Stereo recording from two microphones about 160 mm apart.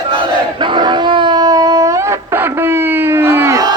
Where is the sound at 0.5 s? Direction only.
30° right (ahead or behind).